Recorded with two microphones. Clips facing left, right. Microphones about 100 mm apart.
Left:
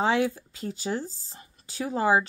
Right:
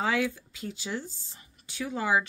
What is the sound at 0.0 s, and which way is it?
Speech, 30° left (ahead or behind).